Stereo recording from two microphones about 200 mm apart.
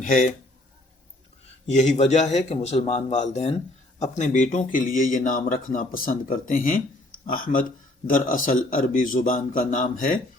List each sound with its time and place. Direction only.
0.0 s speech: 40° left (ahead or behind)
1.6 s speech: 35° left (ahead or behind)